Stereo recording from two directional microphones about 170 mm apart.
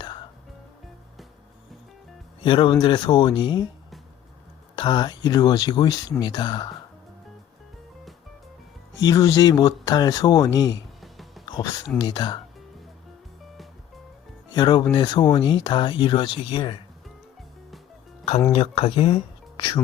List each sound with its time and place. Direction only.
2.4 s speech: 30° left (ahead or behind)
4.7 s speech: 25° left (ahead or behind)
9.0 s speech: 20° left (ahead or behind)
11.0 s music: centre (ahead or behind)
11.4 s a sound: 25° left (ahead or behind)
11.9 s speech: 25° left (ahead or behind)
14.5 s speech: 25° left (ahead or behind)
18.5 s speech: 35° left (ahead or behind)